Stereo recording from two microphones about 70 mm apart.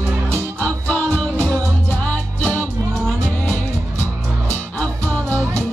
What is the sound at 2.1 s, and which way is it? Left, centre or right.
Music, left.